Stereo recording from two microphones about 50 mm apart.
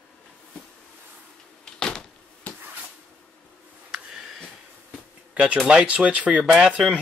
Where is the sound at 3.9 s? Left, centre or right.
Centre.